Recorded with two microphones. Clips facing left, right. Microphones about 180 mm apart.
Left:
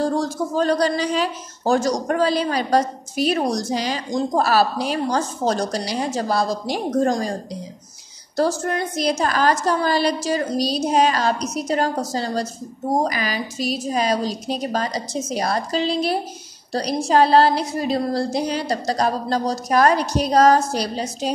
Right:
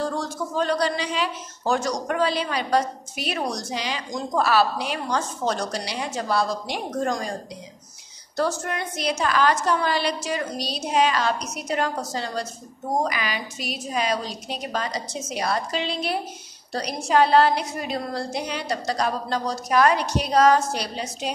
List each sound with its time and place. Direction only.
0.0 s speech: 40° left (ahead or behind)
8.4 s speech: 35° left (ahead or behind)